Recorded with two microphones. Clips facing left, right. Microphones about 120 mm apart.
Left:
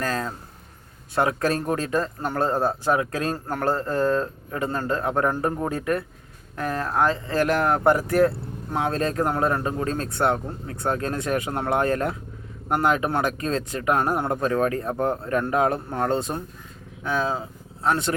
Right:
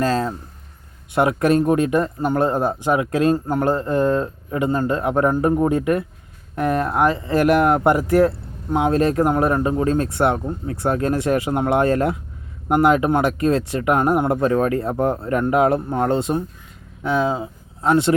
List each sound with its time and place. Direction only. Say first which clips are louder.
0.0 s speech: right 7 dB; 25° right (ahead or behind)